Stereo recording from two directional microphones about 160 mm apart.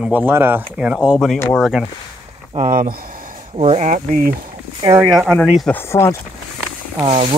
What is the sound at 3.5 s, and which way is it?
Speech, 40° right (ahead or behind).